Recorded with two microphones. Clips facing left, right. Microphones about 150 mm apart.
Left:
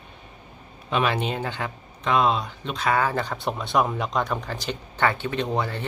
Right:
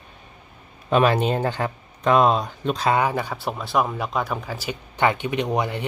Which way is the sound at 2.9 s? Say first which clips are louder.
Right 1 dB; 15° right (ahead or behind).